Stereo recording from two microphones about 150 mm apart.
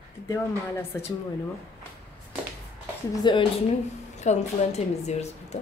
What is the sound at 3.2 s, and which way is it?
Speech, 30° left (ahead or behind).